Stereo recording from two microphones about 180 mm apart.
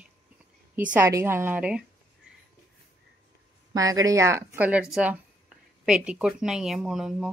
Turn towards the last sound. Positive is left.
turn(degrees=-5)  # may be behind; listen again after turning